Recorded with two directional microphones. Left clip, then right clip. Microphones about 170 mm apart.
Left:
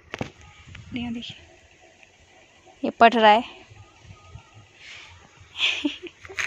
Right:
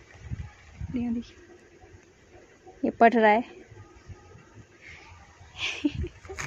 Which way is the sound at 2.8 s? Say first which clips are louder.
Left 4 dB; 5° left (ahead or behind).